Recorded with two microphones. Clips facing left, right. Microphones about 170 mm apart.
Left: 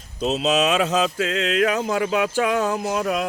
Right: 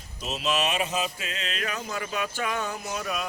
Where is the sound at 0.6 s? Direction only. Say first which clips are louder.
Left 8 dB; 90° left; by 3.2 s 70° left (ahead or behind).